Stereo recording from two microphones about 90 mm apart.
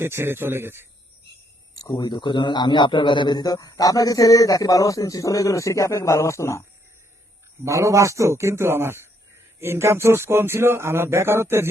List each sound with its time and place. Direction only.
0.0 s speech: 25° right (ahead or behind)
2.0 s a man's voice: 50° left (ahead or behind); by 6.6 s 35° left (ahead or behind)
7.6 s a man's voice: 35° right (ahead or behind)